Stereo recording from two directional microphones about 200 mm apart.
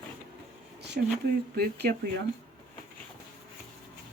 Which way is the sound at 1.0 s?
50° right (ahead or behind).